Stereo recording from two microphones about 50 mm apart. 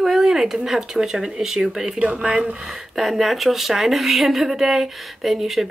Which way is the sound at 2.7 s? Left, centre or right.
Centre.